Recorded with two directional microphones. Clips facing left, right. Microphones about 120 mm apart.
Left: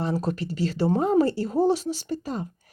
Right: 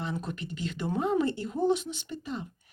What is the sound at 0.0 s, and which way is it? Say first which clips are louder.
Speech: left 8 dB; 35° left (ahead or behind).